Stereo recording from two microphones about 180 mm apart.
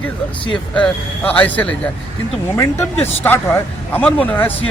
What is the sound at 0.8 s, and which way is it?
Speech, 10° left (ahead or behind).